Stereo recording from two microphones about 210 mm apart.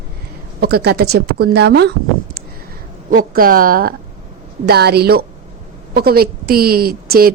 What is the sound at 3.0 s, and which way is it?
A woman's voice, 40° right (ahead or behind).